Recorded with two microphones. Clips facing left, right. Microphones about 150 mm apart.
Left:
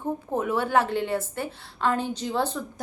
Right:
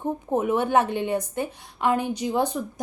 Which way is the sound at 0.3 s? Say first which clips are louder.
Right 4 dB; 20° right (ahead or behind).